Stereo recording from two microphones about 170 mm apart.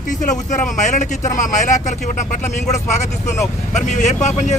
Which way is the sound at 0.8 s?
45° left (ahead or behind).